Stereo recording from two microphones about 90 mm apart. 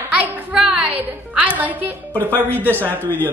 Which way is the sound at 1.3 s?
15° right (ahead or behind).